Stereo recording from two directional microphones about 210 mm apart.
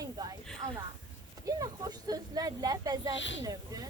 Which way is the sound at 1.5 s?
15° right (ahead or behind).